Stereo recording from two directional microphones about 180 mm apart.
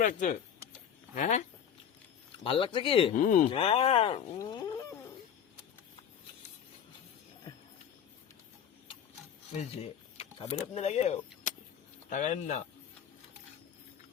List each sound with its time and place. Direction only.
0.0 s speech: 45° left (ahead or behind)
2.4 s speech: 30° left (ahead or behind)
3.2 s speech: 45° left (ahead or behind)
3.5 s speech: 30° left (ahead or behind)
4.4 s a sound: 20° left (ahead or behind)
9.6 s speech: 35° left (ahead or behind)